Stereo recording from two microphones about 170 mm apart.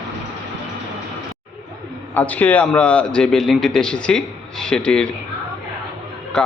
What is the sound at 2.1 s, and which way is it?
A man's voice, 10° left (ahead or behind).